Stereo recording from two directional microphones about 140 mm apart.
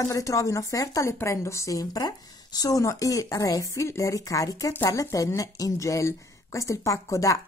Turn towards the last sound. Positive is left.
turn(degrees=25)  # may be behind; listen again after turning